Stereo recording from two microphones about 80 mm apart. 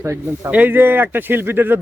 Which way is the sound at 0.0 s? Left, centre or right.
Right.